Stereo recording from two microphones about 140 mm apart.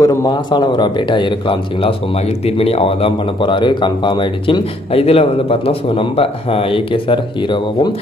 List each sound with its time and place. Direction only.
0.0 s speech: 25° left (ahead or behind)